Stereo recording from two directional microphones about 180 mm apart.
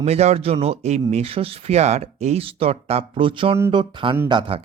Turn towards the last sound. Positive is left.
turn(degrees=-30)  # may be behind; listen again after turning